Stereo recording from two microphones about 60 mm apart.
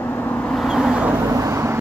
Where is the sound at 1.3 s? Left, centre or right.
Right.